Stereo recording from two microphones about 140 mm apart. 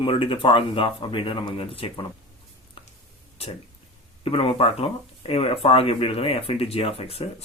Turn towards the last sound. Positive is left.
turn(degrees=45)  # may be behind; listen again after turning